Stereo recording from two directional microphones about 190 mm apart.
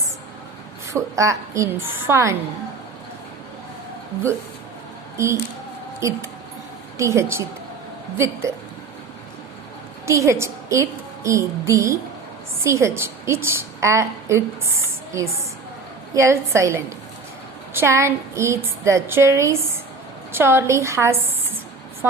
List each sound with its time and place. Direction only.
0.9 s a woman's voice: 15° right (ahead or behind)
5.1 s a woman's voice: 15° right (ahead or behind)
10.1 s a woman's voice: 15° right (ahead or behind)